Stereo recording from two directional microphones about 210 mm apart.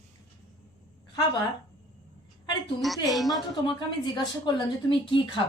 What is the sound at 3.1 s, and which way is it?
Speech, centre (ahead or behind).